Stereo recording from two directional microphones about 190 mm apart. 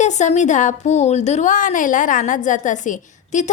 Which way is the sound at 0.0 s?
40° left (ahead or behind).